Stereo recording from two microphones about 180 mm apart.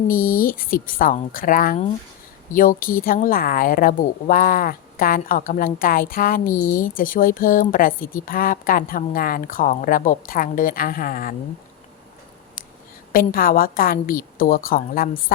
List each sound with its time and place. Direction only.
0.1 s a woman's voice: 50° left (ahead or behind)
13.1 s a woman's voice: 50° left (ahead or behind)